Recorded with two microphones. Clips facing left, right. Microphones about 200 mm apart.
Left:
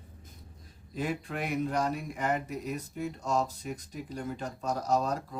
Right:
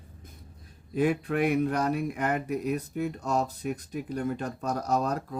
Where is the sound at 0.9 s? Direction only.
55° right (ahead or behind).